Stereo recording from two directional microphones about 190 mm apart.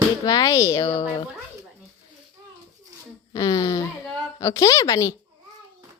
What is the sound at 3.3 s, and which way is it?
A woman's voice, 20° left (ahead or behind).